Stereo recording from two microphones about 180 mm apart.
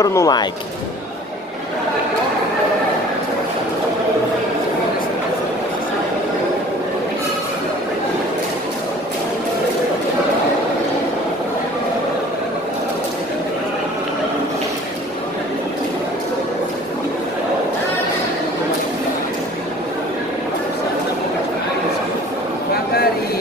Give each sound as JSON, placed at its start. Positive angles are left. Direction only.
{"t": 0.0, "sound": "speech", "side_deg": 20}